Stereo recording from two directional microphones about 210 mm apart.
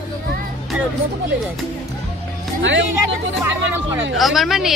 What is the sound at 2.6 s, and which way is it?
Speech, 60° right (ahead or behind).